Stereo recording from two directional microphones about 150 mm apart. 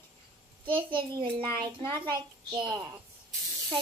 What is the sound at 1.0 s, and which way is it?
A child's voice, 35° right (ahead or behind).